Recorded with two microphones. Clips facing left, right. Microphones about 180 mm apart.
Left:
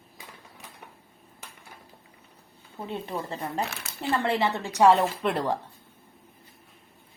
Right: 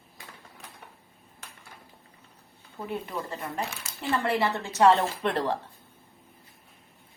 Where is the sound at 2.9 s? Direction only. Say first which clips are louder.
Left 1 dB; 30° left (ahead or behind).